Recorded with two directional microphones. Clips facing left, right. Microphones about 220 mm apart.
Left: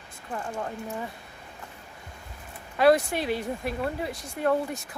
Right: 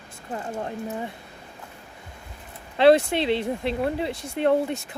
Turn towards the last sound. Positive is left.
turn(degrees=-25)  # may be behind; listen again after turning